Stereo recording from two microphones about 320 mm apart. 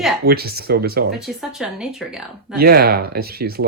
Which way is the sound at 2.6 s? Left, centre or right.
Right.